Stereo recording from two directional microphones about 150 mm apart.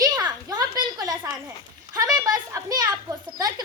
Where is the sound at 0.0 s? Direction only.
25° right (ahead or behind).